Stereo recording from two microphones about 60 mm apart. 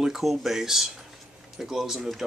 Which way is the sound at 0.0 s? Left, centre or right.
Centre.